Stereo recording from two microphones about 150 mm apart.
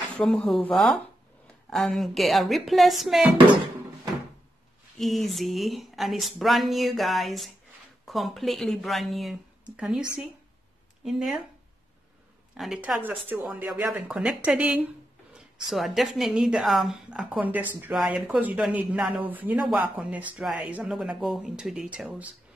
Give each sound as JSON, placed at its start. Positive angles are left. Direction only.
{"t": 0.2, "sound": "speech", "side_deg": 5}
{"t": 4.9, "sound": "speech", "side_deg": 0}
{"t": 11.1, "sound": "speech", "side_deg": 0}
{"t": 12.5, "sound": "speech", "side_deg": -5}